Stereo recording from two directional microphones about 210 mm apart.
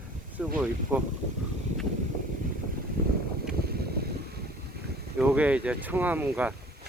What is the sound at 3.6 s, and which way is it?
Boat, 50° right (ahead or behind).